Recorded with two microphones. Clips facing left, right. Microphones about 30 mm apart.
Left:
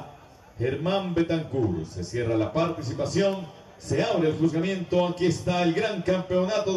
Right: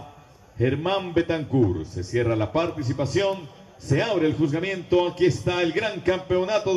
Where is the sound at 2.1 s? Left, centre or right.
Centre.